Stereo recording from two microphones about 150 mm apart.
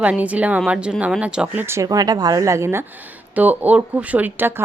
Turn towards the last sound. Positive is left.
turn(degrees=-15)  # may be behind; listen again after turning